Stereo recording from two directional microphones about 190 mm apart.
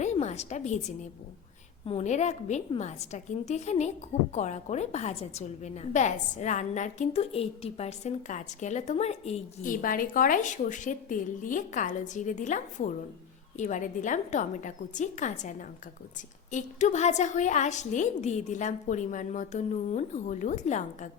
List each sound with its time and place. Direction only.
0.0 s a woman's voice: 35° left (ahead or behind)
9.8 s a woman's voice: 45° left (ahead or behind)